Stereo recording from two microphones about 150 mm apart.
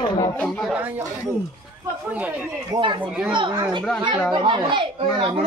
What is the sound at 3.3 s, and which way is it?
A man's voice, 35° right (ahead or behind).